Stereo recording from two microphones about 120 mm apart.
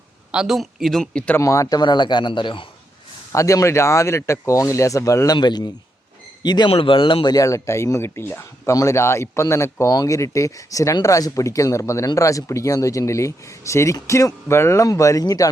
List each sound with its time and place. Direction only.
0.3 s speech: 5° right (ahead or behind)
1.4 s a man's voice: 25° left (ahead or behind)
3.3 s a man's voice: 25° left (ahead or behind)
6.7 s speech: 50° left (ahead or behind)
7.3 s speech: 25° left (ahead or behind)